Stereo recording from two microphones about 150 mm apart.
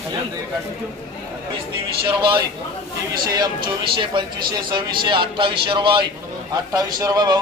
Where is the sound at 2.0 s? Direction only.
30° right (ahead or behind).